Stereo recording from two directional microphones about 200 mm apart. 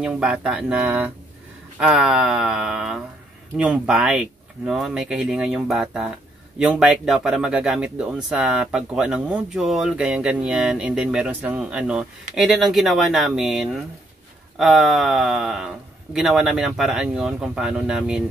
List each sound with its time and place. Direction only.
0.0 s speech: 5° right (ahead or behind)